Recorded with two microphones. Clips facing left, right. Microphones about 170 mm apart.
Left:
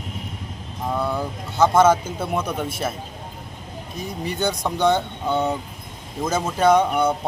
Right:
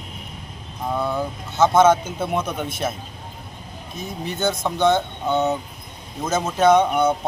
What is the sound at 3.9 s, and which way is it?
Speech, 10° left (ahead or behind).